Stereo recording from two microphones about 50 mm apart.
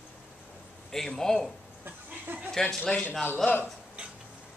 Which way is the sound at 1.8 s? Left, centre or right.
Right.